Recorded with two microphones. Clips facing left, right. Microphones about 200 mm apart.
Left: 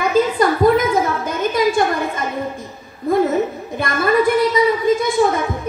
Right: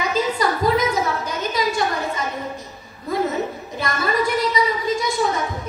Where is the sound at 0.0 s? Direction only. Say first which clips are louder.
Left 6 dB; 55° left (ahead or behind).